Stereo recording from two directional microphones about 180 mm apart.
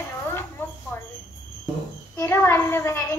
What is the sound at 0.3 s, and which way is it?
Mouse, 15° left (ahead or behind).